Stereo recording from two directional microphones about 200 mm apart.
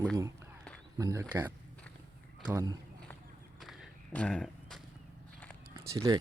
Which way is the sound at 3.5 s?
Centre (ahead or behind).